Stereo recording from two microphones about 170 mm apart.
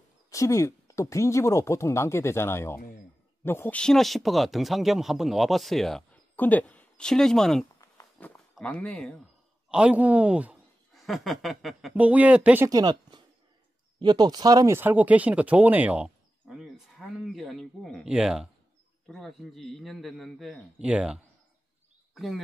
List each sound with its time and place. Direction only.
0.3 s speech: 20° left (ahead or behind); by 7.6 s 5° left (ahead or behind)
7.8 s a sound: 20° left (ahead or behind)
8.5 s speech: 5° left (ahead or behind)
9.7 s speech: 5° right (ahead or behind)
12.6 s speech: 25° right (ahead or behind); by 22.4 s centre (ahead or behind)